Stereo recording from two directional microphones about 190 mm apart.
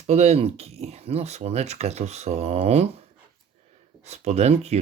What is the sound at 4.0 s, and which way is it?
Speech, 35° right (ahead or behind).